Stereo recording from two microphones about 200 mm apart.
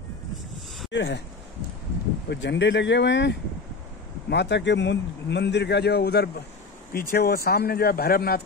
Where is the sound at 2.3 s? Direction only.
60° left (ahead or behind).